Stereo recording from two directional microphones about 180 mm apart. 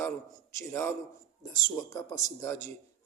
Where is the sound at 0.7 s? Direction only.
15° left (ahead or behind).